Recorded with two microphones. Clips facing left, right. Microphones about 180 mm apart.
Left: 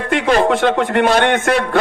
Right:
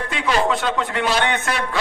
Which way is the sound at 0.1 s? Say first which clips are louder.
Left 7 dB; 50° left (ahead or behind).